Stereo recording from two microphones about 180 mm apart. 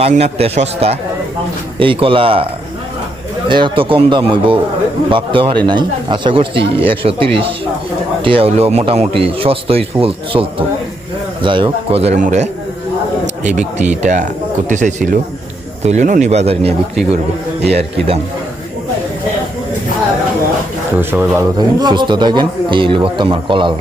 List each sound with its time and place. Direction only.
0.0 s speech: 35° right (ahead or behind)
3.5 s speech: 30° right (ahead or behind)
11.4 s a man's voice: 30° right (ahead or behind)
21.0 s speech: 10° right (ahead or behind); by 23.7 s 25° right (ahead or behind)